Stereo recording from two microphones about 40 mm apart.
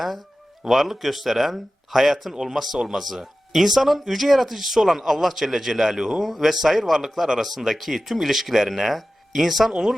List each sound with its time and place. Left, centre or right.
0.7 s speech: centre
2.3 s speech: centre
2.8 s speech: centre
6.2 s speech: centre